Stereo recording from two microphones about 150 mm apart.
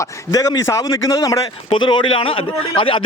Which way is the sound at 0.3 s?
20° left (ahead or behind).